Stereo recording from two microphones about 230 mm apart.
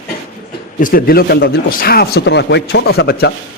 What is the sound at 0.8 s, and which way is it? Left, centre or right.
Speech, left.